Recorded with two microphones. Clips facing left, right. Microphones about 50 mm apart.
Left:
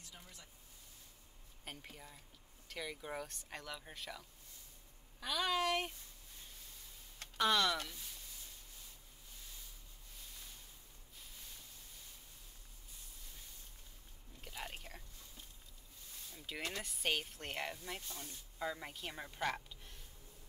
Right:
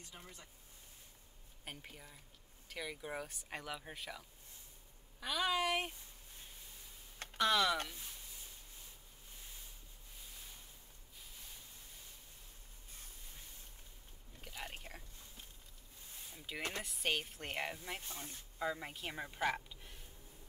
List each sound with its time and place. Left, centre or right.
0.0 s speech: right
1.6 s speech: centre
7.3 s speech: centre
14.4 s chewing: centre
14.8 s whispering: centre
16.3 s speech: centre
18.0 s speech: right
18.6 s a woman's voice: centre